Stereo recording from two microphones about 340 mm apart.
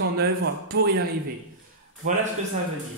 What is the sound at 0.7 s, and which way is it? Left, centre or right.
Speech, right.